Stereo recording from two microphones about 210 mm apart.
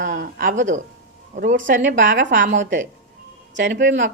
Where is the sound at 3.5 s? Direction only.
60° right (ahead or behind).